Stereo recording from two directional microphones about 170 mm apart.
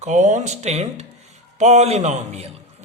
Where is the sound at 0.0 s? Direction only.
45° right (ahead or behind).